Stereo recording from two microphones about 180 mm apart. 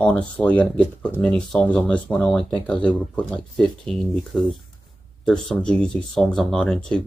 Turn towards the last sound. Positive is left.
turn(degrees=5)  # may be behind; listen again after turning